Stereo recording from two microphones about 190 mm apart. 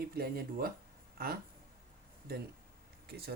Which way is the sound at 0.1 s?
50° right (ahead or behind).